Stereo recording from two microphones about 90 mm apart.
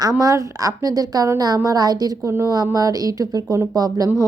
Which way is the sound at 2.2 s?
30° right (ahead or behind).